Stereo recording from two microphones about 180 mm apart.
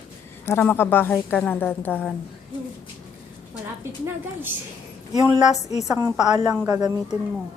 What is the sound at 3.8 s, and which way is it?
Speech, 15° right (ahead or behind).